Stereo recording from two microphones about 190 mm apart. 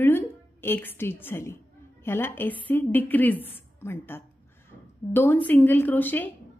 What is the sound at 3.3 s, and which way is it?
Speech, 30° left (ahead or behind).